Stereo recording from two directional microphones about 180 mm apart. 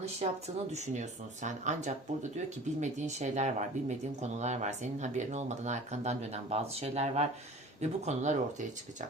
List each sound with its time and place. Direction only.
0.0 s speech: 35° right (ahead or behind)